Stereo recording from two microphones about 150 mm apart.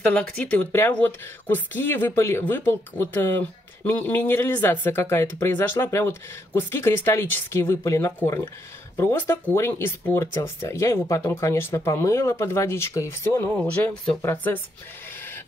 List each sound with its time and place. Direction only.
0.0 s speech: 10° left (ahead or behind)